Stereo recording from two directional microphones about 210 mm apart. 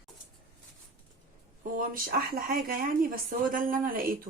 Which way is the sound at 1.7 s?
40° right (ahead or behind).